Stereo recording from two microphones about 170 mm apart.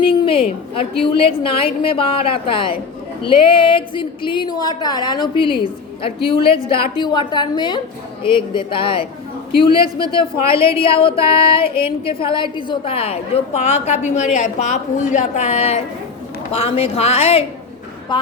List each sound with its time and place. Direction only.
0.0 s a woman's voice: 30° left (ahead or behind)